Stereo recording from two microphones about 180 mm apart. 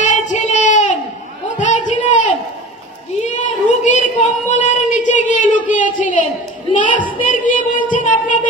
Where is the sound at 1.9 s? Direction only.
45° left (ahead or behind).